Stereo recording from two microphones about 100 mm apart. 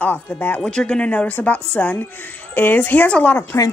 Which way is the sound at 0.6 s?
10° left (ahead or behind).